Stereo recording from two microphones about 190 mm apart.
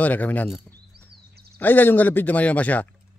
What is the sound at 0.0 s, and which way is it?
Speech, 10° left (ahead or behind).